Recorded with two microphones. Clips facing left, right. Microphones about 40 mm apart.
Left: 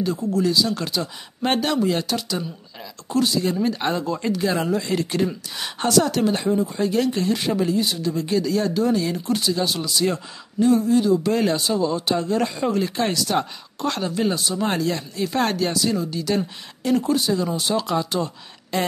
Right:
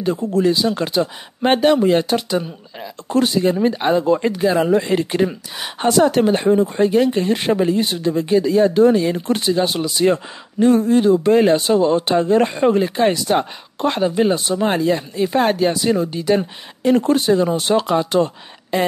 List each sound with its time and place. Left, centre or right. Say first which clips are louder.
0.0 s speech: right 4 dB; right
6.9 s speech: right 5 dB; right
12.8 s speech: right 6 dB; right
15.8 s speech: right 5 dB; right
16.9 s speech: right 5 dB; right
18.7 s speech: right 5 dB; centre